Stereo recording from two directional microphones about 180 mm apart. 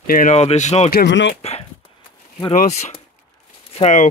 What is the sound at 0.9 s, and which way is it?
Speech, 70° left (ahead or behind).